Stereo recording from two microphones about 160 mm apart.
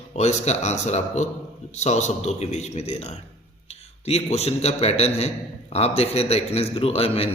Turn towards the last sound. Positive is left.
turn(degrees=40)  # may be behind; listen again after turning